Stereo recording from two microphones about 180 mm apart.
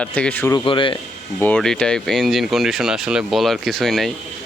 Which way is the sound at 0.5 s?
30° left (ahead or behind).